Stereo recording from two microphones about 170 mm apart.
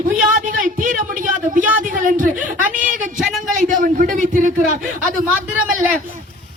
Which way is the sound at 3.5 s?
50° right (ahead or behind).